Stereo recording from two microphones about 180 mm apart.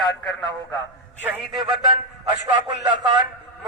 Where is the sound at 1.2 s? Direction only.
5° right (ahead or behind).